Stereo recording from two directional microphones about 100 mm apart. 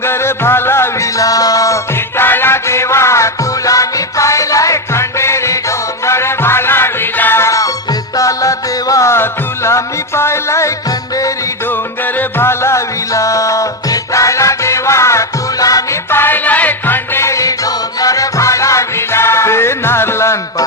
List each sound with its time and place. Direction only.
0.0 s music: 25° left (ahead or behind)
2.1 s music: 20° left (ahead or behind)
12.4 s music: 25° left (ahead or behind)
16.0 s music: 20° left (ahead or behind)